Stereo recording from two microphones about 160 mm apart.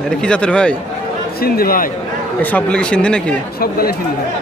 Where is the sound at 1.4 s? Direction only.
70° left (ahead or behind).